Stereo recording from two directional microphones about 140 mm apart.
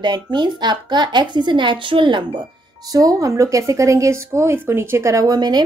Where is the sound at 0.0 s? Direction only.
30° right (ahead or behind).